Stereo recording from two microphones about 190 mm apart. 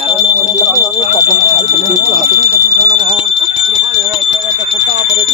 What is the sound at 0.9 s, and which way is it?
Bicycle bell, 40° left (ahead or behind).